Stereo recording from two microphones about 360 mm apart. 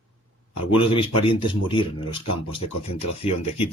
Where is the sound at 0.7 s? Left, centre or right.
Centre.